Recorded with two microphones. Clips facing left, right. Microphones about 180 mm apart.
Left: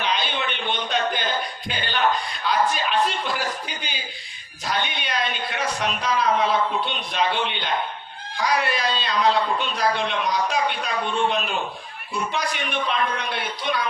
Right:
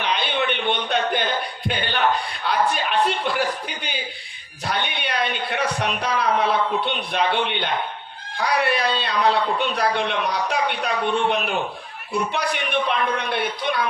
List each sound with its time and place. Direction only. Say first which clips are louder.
0.0 s speech: right 2 dB; 60° right (ahead or behind)